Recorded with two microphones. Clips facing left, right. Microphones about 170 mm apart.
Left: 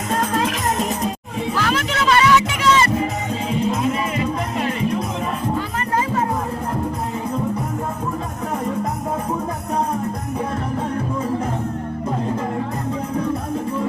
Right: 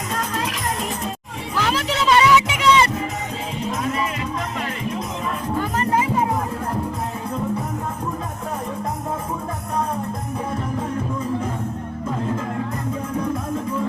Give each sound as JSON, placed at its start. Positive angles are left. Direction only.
{"t": 2.0, "sound": "music", "side_deg": -20}